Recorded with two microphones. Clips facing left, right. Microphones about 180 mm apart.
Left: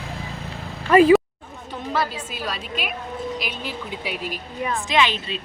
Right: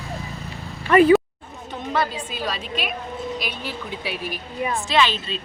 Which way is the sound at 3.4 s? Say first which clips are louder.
Even; 15° left (ahead or behind).